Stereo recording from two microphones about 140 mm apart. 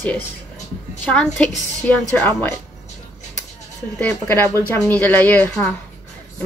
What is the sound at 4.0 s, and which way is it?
A woman's voice, 10° left (ahead or behind).